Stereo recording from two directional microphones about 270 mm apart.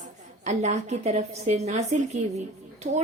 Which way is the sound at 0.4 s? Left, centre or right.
Right.